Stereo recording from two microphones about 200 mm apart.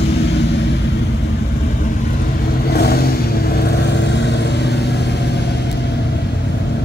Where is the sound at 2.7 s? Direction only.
50° left (ahead or behind).